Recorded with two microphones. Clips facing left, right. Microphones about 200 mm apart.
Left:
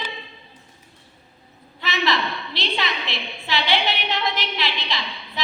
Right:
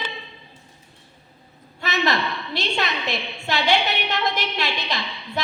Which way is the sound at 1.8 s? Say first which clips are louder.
Right 1 dB; 45° right (ahead or behind).